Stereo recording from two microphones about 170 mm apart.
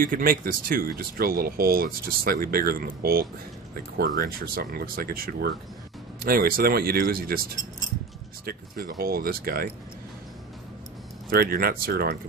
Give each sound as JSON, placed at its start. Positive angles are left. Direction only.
{"t": 0.0, "sound": "speech", "side_deg": -55}
{"t": 11.2, "sound": "speech", "side_deg": -65}